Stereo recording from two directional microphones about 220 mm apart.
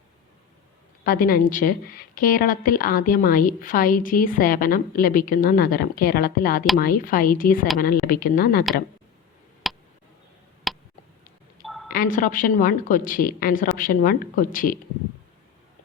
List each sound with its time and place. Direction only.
1.0 s a woman's voice: 40° left (ahead or behind)
9.6 s a sound: centre (ahead or behind)
11.6 s telephone: centre (ahead or behind)
11.9 s a woman's voice: 40° left (ahead or behind)